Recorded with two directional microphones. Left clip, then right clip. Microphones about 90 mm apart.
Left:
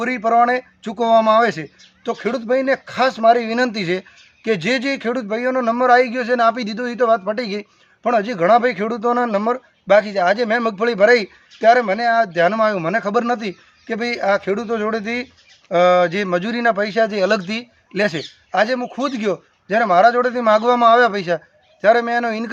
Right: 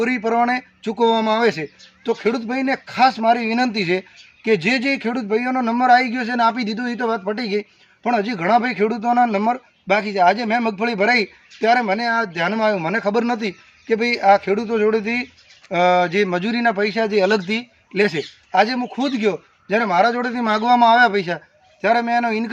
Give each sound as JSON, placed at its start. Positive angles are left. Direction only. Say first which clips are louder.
{"t": 0.0, "sound": "a man's voice", "louder": "left 3 dB", "side_deg": 40}